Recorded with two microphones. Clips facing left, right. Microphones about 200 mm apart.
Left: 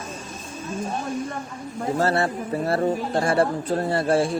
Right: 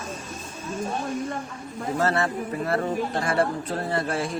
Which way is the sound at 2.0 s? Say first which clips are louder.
Left 1 dB; 35° left (ahead or behind).